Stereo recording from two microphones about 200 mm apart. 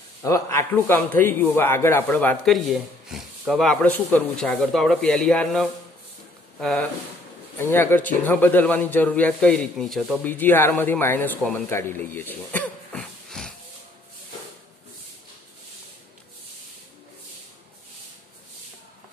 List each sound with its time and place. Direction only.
0.2 s a man's voice: 15° left (ahead or behind)